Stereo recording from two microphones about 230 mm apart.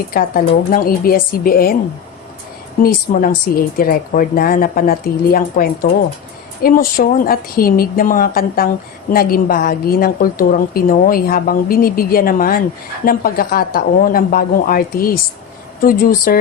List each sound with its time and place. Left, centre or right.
0.1 s a woman's voice: left
2.8 s a woman's voice: left